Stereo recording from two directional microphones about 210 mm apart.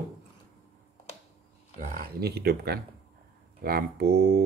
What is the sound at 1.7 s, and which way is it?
Speech, 45° right (ahead or behind).